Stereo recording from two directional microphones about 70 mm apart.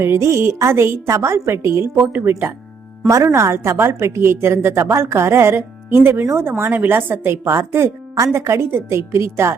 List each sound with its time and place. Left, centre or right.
0.0 s a woman's voice: right
3.1 s a woman's voice: right